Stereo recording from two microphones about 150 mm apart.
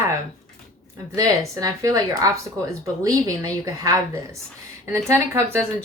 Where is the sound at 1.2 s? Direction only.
20° right (ahead or behind).